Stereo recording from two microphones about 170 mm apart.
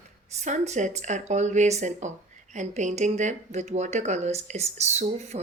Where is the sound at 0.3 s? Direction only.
45° right (ahead or behind).